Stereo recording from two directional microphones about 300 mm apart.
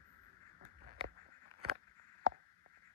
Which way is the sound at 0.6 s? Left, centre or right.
Right.